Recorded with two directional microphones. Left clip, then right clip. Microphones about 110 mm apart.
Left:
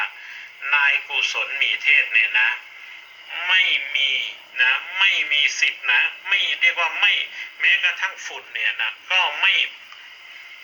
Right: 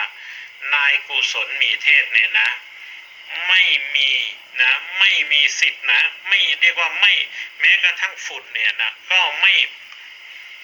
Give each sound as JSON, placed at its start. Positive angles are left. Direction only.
{"t": 0.6, "sound": "speech", "side_deg": -20}